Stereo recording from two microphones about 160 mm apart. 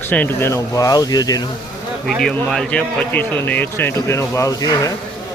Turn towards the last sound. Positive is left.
turn(degrees=20)  # may be behind; listen again after turning